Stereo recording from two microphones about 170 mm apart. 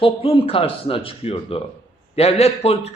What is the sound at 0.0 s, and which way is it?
A man's voice, 30° left (ahead or behind).